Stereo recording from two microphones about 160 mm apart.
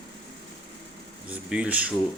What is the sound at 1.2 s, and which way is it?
Speech, 10° right (ahead or behind).